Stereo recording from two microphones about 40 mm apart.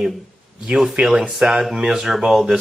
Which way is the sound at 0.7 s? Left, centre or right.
Centre.